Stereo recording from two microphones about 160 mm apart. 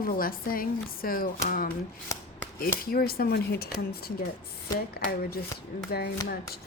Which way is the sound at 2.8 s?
70° left (ahead or behind).